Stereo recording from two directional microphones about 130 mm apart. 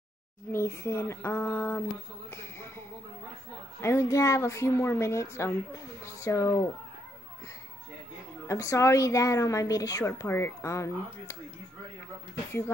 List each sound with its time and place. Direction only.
0.5 s speech: 20° left (ahead or behind)
3.8 s a woman's voice: 20° left (ahead or behind)
8.5 s a woman's voice: 25° left (ahead or behind)